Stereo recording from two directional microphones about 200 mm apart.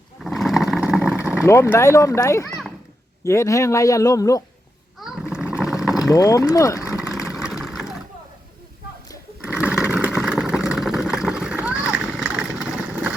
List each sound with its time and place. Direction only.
0.2 s a sound: centre (ahead or behind)
1.4 s speech: 15° left (ahead or behind)
4.9 s a sound: centre (ahead or behind)
6.1 s speech: 15° left (ahead or behind)
6.8 s vehicle: 5° right (ahead or behind)
9.5 s sewing machine: 5° right (ahead or behind)
10.2 s vehicle: centre (ahead or behind)